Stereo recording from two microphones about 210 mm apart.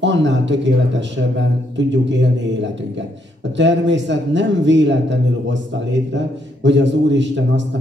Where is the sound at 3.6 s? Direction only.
60° right (ahead or behind).